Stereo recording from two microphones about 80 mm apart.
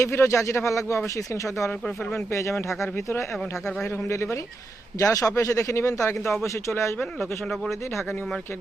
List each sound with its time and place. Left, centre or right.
0.0 s speech: left
7.2 s speech: centre